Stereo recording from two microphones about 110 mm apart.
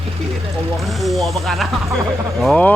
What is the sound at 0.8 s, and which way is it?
Speech, centre (ahead or behind).